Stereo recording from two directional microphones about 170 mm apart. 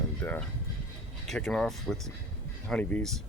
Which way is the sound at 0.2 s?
10° left (ahead or behind).